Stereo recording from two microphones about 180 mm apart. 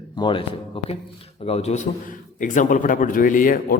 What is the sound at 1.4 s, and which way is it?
A man's voice, 35° left (ahead or behind).